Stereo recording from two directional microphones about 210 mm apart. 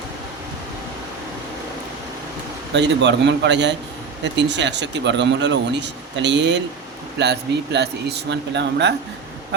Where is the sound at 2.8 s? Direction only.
55° right (ahead or behind).